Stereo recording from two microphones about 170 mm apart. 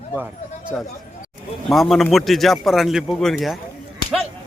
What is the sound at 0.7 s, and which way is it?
Speech, 5° left (ahead or behind).